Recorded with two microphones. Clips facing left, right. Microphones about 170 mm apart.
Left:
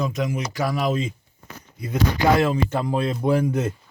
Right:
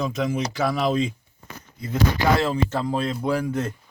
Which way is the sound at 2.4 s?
15° left (ahead or behind).